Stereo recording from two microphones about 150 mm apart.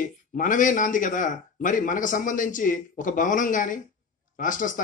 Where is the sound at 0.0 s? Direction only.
60° left (ahead or behind).